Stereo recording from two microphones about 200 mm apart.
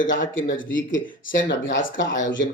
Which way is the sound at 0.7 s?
70° left (ahead or behind).